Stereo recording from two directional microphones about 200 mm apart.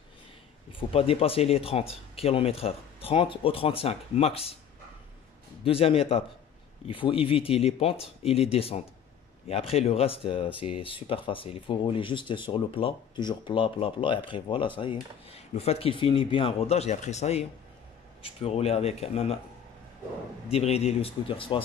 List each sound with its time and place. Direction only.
0.7 s speech: 30° left (ahead or behind)
5.6 s speech: 30° left (ahead or behind)
20.5 s speech: 30° left (ahead or behind)